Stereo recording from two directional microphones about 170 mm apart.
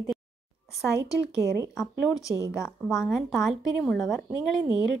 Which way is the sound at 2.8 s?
Centre (ahead or behind).